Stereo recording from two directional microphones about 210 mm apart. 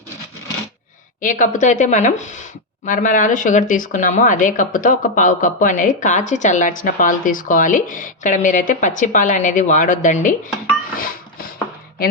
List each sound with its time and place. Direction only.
1.2 s speech: 40° left (ahead or behind)